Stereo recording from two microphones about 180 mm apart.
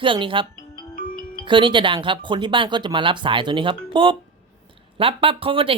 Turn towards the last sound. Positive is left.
turn(degrees=-30)  # may be behind; listen again after turning